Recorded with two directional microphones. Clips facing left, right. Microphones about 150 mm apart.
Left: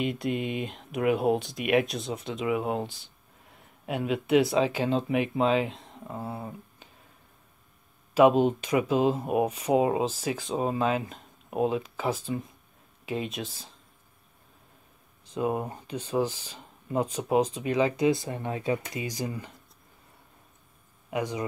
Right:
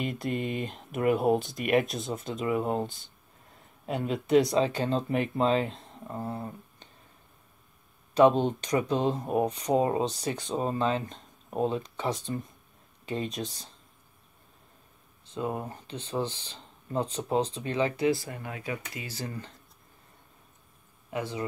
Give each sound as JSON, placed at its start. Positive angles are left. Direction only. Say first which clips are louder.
{"t": 0.0, "sound": "speech", "louder": "left 2 dB", "side_deg": 0}
{"t": 8.1, "sound": "speech", "louder": "left 1 dB", "side_deg": 5}
{"t": 15.3, "sound": "speech", "louder": "left 4 dB", "side_deg": 20}
{"t": 21.1, "sound": "speech", "louder": "left 3 dB", "side_deg": 15}